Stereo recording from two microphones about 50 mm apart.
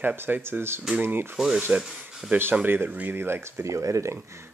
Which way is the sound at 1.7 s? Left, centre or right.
Right.